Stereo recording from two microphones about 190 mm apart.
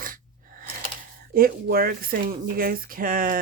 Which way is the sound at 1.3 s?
50° right (ahead or behind).